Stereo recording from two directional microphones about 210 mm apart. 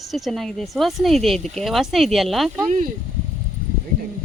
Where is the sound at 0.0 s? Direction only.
Centre (ahead or behind).